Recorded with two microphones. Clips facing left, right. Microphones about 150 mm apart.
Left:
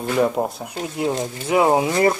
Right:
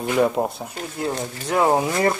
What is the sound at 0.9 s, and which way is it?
Speech, 15° left (ahead or behind).